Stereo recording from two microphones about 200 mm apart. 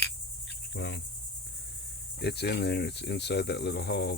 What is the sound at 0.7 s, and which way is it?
Cricket, 60° left (ahead or behind).